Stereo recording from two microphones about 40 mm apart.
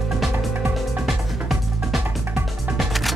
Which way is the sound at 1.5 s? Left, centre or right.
Centre.